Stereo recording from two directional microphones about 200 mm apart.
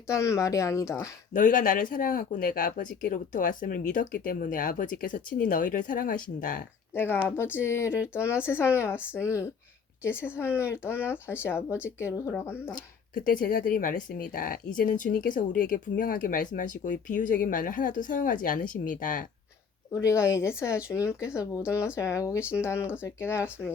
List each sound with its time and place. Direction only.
0.1 s speech: 15° left (ahead or behind)
1.3 s speech: 40° left (ahead or behind)
6.9 s speech: 10° left (ahead or behind)
7.9 s speech: 5° right (ahead or behind)
8.1 s speech: 15° left (ahead or behind)
12.7 s speech: 40° left (ahead or behind)
19.9 s speech: 15° left (ahead or behind)